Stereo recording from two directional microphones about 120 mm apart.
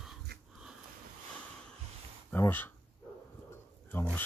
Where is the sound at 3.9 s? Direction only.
15° left (ahead or behind).